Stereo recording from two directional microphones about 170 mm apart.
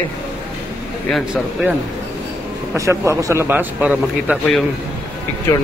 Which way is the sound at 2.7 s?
15° right (ahead or behind).